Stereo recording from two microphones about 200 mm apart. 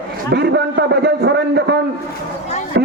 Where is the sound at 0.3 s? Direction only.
55° right (ahead or behind).